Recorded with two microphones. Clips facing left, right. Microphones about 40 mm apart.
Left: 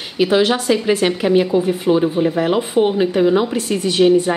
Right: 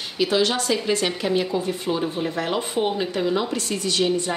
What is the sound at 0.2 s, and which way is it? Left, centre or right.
A woman's voice, left.